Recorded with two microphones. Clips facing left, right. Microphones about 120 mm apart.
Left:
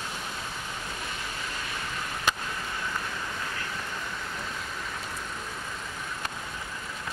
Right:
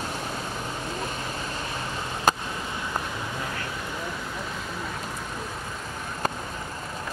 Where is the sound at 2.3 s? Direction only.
40° right (ahead or behind).